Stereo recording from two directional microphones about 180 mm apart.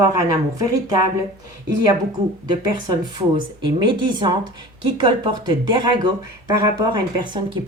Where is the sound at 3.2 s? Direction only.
25° right (ahead or behind).